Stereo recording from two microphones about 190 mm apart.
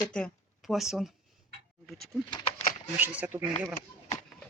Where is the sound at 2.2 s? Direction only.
25° left (ahead or behind).